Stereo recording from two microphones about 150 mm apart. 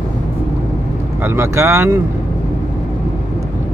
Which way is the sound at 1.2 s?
15° right (ahead or behind).